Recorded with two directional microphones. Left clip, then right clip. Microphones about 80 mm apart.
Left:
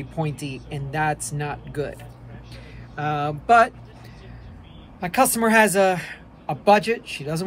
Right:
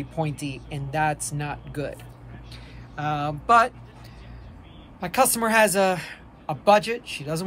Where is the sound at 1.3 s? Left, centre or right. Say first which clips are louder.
Left 2 dB; right.